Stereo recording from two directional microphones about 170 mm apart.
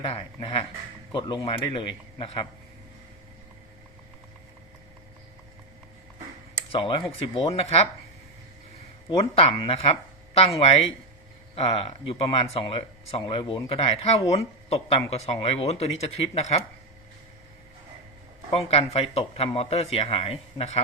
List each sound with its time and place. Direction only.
0.0 s a man's voice: 35° left (ahead or behind)
6.7 s a man's voice: 30° left (ahead or behind)
9.0 s speech: 35° left (ahead or behind)
18.5 s speech: 35° left (ahead or behind)